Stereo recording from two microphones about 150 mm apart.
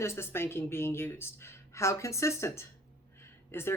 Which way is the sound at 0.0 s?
15° left (ahead or behind).